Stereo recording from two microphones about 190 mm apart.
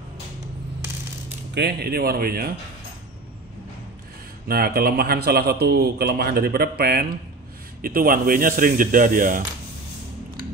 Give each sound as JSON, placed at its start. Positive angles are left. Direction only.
{"t": 1.5, "sound": "speech", "side_deg": -60}
{"t": 4.5, "sound": "a man's voice", "side_deg": -50}